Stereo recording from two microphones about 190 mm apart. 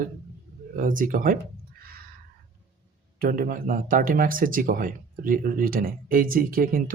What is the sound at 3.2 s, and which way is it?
Speech, 50° right (ahead or behind).